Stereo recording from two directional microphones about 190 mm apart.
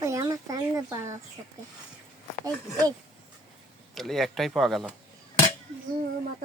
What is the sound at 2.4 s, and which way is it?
Speech, 20° right (ahead or behind).